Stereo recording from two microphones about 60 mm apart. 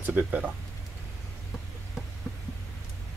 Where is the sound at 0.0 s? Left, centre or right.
Right.